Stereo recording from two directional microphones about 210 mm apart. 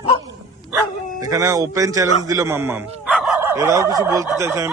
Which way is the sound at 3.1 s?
Centre (ahead or behind).